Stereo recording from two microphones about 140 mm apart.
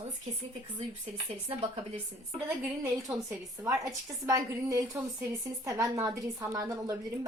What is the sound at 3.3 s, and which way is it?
A woman's voice, 20° right (ahead or behind).